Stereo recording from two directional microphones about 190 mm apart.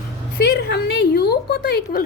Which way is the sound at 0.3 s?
55° left (ahead or behind).